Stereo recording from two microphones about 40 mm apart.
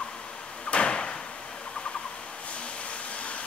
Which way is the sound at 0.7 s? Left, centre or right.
Left.